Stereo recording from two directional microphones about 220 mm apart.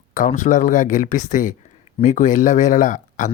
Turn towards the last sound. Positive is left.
turn(degrees=35)  # may be behind; listen again after turning